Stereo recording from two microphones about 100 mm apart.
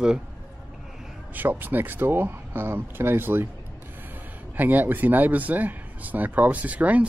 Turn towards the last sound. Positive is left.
turn(degrees=-15)  # may be behind; listen again after turning